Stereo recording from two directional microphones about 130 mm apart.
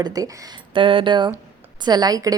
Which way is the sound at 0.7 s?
40° right (ahead or behind).